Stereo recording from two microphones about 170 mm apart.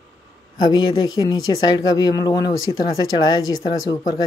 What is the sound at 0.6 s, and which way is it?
Speech, 25° left (ahead or behind).